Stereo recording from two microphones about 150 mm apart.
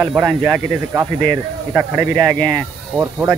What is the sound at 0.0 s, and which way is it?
Speech, 10° right (ahead or behind).